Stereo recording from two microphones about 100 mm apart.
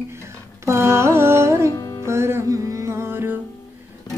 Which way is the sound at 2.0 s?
25° right (ahead or behind).